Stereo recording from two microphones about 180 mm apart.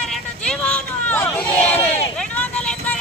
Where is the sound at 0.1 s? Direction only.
5° left (ahead or behind).